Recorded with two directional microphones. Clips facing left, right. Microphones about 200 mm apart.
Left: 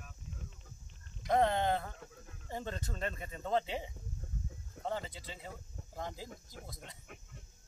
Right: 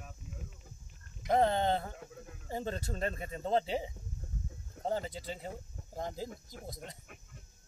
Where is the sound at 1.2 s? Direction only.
25° right (ahead or behind).